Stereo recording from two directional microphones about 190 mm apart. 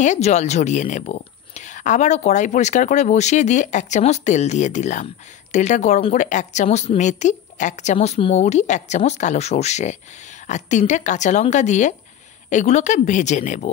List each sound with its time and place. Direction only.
0.0 s speech: 40° left (ahead or behind)